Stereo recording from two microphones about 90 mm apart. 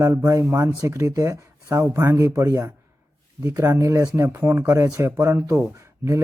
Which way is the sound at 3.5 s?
25° right (ahead or behind).